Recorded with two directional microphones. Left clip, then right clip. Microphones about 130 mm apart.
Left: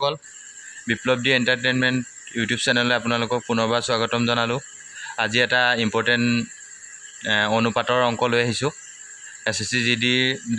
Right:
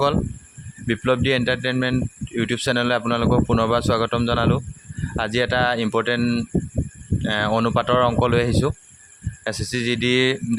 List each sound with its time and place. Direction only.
0.9 s speech: 30° right (ahead or behind)